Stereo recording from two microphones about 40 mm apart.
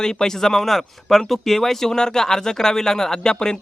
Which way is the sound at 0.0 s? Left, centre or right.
Centre.